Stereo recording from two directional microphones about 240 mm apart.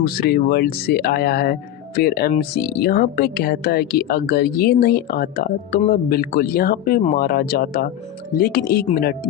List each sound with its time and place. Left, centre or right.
0.0 s speech: left